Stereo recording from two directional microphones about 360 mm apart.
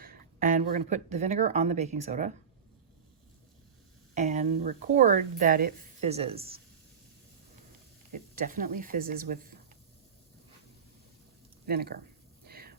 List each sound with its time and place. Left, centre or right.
0.0 s a woman's voice: right
4.1 s a woman's voice: centre
8.1 s a woman's voice: right
11.6 s speech: right
12.5 s a sound: right